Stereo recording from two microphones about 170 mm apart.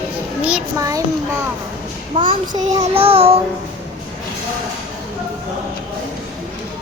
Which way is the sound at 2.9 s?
35° right (ahead or behind).